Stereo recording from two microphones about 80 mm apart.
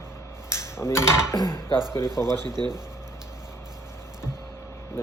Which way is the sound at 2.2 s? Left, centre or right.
Left.